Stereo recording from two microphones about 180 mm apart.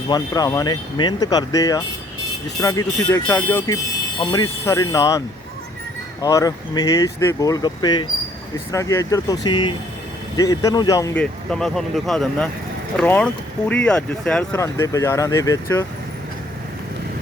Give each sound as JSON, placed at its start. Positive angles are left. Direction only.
{"t": 0.1, "sound": "speech", "side_deg": 20}
{"t": 6.2, "sound": "speech", "side_deg": 20}
{"t": 11.2, "sound": "speech", "side_deg": 5}
{"t": 14.5, "sound": "speech", "side_deg": 15}